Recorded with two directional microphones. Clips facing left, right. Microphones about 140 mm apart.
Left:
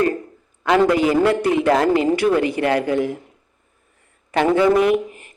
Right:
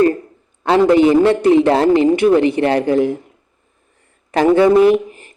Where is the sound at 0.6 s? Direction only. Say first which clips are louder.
Right 5 dB; 30° right (ahead or behind).